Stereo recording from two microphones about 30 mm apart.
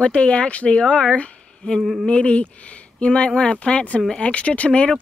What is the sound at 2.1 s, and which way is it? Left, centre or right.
Speech, left.